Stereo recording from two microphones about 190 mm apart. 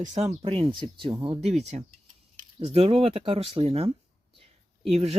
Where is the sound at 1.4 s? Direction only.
35° right (ahead or behind).